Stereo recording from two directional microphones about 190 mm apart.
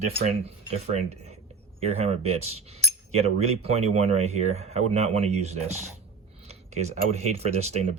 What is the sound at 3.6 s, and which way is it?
Speech, 35° right (ahead or behind).